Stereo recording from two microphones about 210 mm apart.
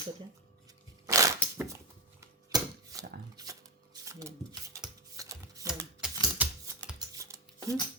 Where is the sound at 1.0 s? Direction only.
15° right (ahead or behind).